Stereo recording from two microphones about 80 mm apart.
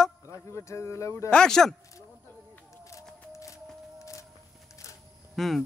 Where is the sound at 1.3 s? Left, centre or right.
Centre.